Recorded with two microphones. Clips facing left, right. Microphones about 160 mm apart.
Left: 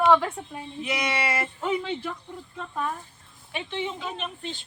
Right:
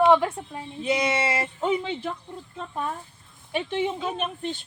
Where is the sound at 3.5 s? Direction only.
50° right (ahead or behind).